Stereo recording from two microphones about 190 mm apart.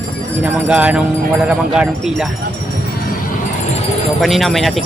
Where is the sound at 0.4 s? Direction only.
5° right (ahead or behind).